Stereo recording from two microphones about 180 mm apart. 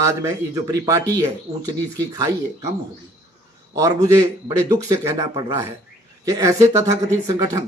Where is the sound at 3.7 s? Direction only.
20° right (ahead or behind).